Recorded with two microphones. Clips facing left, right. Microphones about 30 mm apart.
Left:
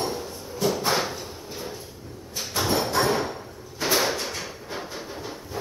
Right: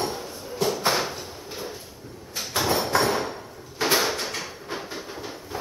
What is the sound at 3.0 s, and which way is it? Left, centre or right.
Hammer, centre.